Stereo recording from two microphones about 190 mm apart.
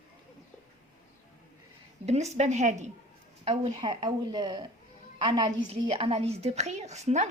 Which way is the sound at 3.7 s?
25° right (ahead or behind).